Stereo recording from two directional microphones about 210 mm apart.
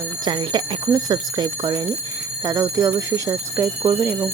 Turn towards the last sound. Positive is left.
turn(degrees=-10)  # may be behind; listen again after turning